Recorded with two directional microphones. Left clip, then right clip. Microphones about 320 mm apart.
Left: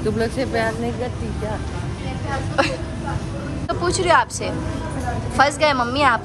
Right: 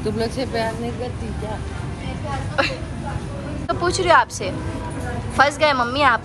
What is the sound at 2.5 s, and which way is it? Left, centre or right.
A woman's voice, centre.